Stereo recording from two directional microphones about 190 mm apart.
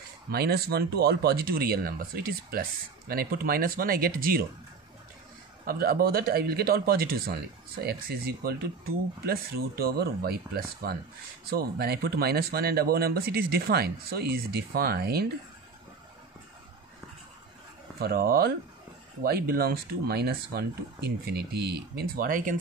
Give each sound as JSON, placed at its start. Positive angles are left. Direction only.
{"t": 0.3, "sound": "speech", "side_deg": -55}
{"t": 5.7, "sound": "speech", "side_deg": -50}
{"t": 17.9, "sound": "speech", "side_deg": -55}